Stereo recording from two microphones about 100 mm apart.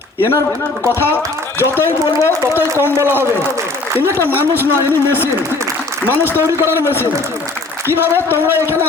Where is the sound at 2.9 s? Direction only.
25° right (ahead or behind).